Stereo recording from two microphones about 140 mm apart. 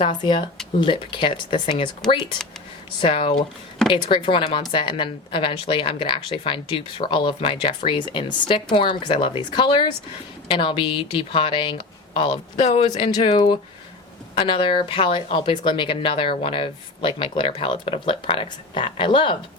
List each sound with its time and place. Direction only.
0.2 s speech: 30° left (ahead or behind)
3.0 s speech: 40° left (ahead or behind)
12.6 s speech: 55° left (ahead or behind)
13.0 s speech: 35° left (ahead or behind)